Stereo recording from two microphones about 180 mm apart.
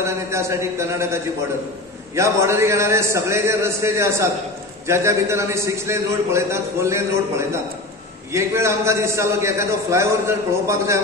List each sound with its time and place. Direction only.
0.0 s a man's voice: 15° right (ahead or behind)